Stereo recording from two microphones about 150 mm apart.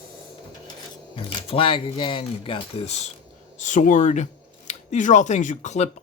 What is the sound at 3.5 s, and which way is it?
Speech, 55° left (ahead or behind).